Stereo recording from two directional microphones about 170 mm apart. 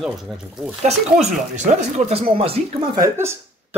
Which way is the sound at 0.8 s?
40° right (ahead or behind).